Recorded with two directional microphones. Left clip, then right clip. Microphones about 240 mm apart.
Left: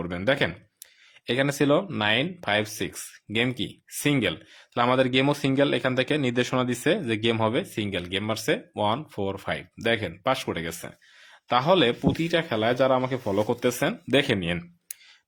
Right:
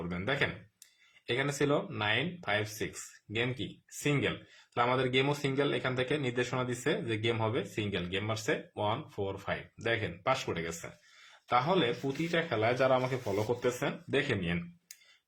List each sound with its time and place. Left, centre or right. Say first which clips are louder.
0.1 s speech: left 8 dB; left